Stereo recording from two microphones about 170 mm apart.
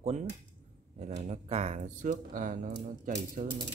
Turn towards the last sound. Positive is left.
turn(degrees=-45)  # may be behind; listen again after turning